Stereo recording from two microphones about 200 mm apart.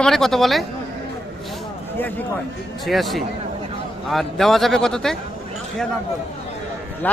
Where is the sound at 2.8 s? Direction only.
Centre (ahead or behind).